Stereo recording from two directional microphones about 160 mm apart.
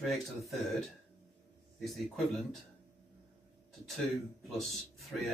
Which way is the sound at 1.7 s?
Centre (ahead or behind).